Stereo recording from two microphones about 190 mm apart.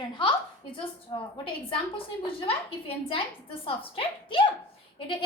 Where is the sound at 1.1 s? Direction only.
25° left (ahead or behind).